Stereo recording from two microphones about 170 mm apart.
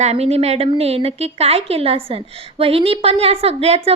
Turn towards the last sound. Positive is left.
turn(degrees=-35)  # may be behind; listen again after turning